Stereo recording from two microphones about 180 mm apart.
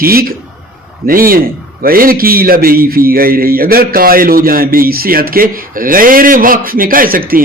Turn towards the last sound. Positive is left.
turn(degrees=-55)  # may be behind; listen again after turning